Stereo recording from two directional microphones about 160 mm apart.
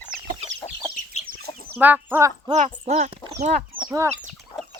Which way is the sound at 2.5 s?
45° right (ahead or behind).